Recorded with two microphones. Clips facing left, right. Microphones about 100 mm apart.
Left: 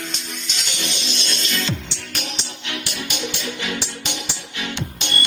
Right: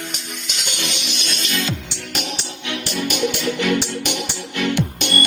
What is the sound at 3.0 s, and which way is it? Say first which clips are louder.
Music: right 10 dB; 55° right (ahead or behind).